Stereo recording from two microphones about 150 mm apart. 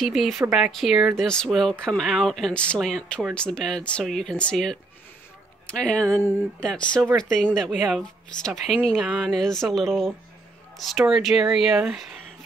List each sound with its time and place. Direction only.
0.0 s speech: centre (ahead or behind)